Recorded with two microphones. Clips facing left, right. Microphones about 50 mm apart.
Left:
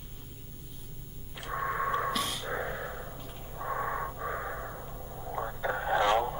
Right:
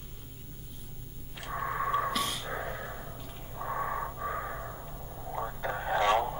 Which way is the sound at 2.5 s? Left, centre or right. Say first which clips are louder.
Left 2 dB; centre.